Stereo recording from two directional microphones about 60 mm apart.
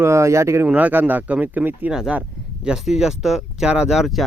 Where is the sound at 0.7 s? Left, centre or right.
Right.